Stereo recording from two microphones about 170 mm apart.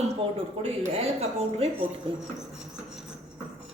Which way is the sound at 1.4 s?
40° right (ahead or behind).